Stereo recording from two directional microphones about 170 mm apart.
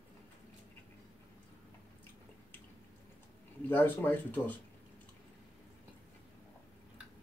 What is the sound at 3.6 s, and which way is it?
Speech, 10° left (ahead or behind).